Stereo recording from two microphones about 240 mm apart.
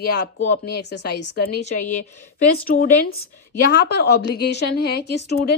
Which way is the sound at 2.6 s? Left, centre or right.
Left.